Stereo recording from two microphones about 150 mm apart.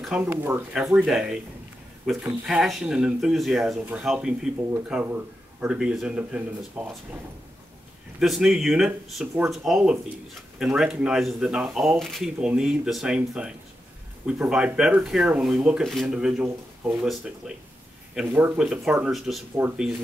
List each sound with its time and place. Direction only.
0.0 s a man's voice: 5° right (ahead or behind)
8.2 s speech: 5° right (ahead or behind)
18.1 s a man's voice: 10° right (ahead or behind)
19.5 s a man's voice: 10° right (ahead or behind)